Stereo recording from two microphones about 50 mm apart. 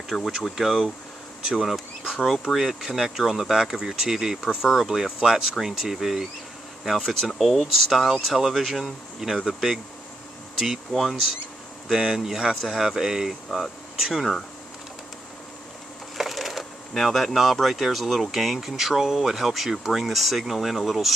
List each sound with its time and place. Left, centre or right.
0.3 s speech: centre
1.4 s speech: centre
1.7 s speech: centre
10.9 s speech: centre
11.9 s speech: centre
16.2 s speech: centre